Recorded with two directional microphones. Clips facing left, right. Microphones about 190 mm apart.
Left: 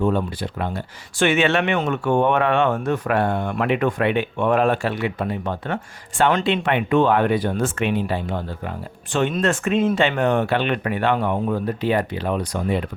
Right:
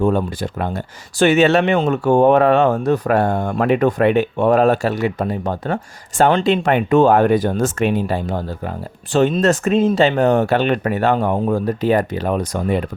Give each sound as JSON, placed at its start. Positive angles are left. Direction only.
{"t": 0.0, "sound": "speech", "side_deg": -45}